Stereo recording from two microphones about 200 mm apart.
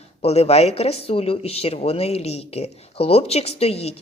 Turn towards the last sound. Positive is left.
turn(degrees=30)  # may be behind; listen again after turning